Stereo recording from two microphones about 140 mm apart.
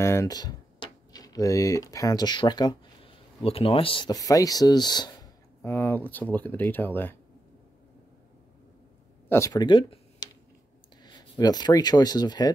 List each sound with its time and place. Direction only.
0.0 s speech: 20° left (ahead or behind)
3.4 s speech: 45° left (ahead or behind)
4.1 s speech: 25° left (ahead or behind)
9.3 s speech: 25° left (ahead or behind)